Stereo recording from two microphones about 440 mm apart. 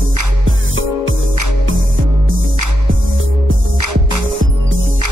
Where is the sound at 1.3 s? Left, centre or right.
Right.